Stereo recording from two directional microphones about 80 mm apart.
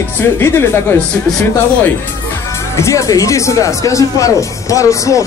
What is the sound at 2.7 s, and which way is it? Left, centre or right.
Speech, left.